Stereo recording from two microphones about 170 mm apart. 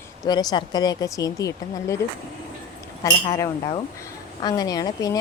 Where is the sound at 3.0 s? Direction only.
15° left (ahead or behind).